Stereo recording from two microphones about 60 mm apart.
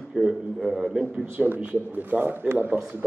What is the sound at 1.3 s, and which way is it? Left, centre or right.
A man's voice, right.